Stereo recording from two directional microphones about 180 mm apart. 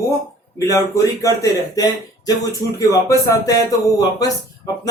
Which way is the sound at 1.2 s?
20° left (ahead or behind).